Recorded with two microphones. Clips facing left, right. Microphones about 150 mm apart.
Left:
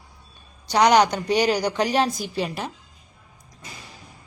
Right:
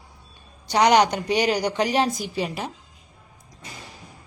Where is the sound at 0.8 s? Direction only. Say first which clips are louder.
Left 1 dB; 45° left (ahead or behind).